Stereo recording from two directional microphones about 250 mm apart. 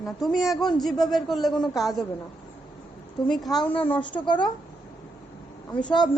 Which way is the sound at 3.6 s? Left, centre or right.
Centre.